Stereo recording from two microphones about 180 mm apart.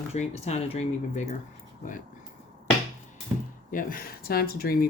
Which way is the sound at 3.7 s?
55° left (ahead or behind).